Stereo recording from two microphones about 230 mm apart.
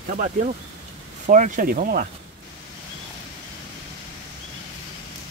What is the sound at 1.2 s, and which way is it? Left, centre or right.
Speech, right.